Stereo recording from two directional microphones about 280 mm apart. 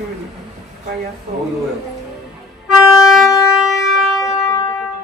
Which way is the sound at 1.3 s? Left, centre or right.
Right.